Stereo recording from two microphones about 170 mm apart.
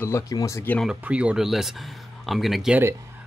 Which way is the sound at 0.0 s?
20° left (ahead or behind).